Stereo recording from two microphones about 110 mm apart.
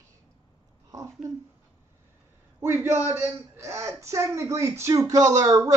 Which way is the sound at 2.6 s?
20° right (ahead or behind).